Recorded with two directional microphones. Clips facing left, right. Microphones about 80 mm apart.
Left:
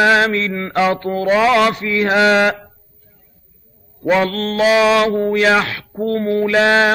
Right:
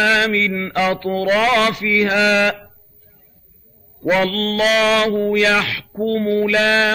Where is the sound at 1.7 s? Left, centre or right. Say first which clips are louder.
Even; left.